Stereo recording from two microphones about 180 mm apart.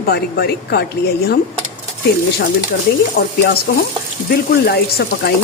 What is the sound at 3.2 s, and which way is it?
A woman's voice, 65° left (ahead or behind).